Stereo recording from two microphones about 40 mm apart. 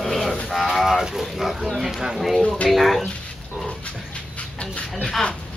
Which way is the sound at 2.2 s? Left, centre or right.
Centre.